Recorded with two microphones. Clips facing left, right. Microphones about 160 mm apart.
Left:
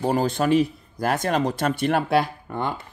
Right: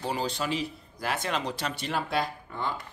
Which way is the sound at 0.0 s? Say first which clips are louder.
Left 9 dB; 50° left (ahead or behind).